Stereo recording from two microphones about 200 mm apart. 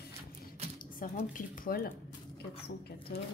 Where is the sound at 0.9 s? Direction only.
45° left (ahead or behind).